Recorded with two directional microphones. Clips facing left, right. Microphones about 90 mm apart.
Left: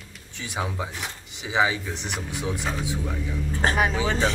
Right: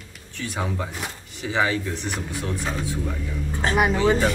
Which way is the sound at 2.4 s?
5° left (ahead or behind).